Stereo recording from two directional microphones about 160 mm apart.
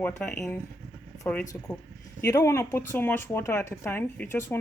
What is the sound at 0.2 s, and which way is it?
Speech, 15° left (ahead or behind).